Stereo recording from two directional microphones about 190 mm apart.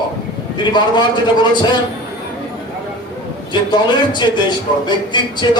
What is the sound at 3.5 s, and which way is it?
Speech, 25° left (ahead or behind).